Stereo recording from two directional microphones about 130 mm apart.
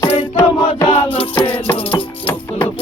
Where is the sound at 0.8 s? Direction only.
45° left (ahead or behind).